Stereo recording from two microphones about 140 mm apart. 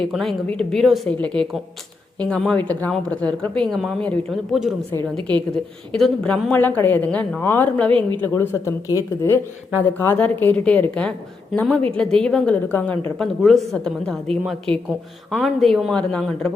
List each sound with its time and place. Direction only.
0.0 s a woman's voice: centre (ahead or behind)
5.9 s speech: 5° left (ahead or behind)
13.1 s a woman's voice: centre (ahead or behind)